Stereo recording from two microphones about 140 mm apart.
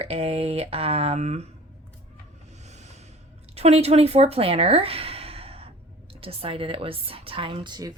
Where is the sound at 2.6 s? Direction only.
55° right (ahead or behind).